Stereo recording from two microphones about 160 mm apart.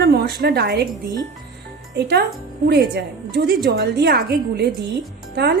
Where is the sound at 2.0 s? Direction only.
90° right.